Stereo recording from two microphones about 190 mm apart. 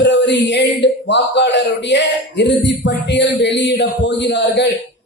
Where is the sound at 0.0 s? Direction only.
65° left (ahead or behind).